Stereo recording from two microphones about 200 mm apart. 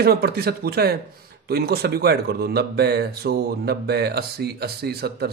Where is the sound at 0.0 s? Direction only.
50° right (ahead or behind).